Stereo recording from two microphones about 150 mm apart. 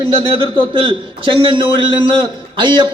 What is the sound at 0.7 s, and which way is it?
A man's voice, 35° right (ahead or behind).